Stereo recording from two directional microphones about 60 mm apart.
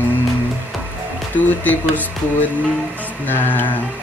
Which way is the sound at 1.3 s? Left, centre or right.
Left.